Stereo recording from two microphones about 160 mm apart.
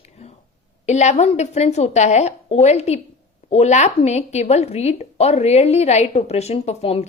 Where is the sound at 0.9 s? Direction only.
45° left (ahead or behind).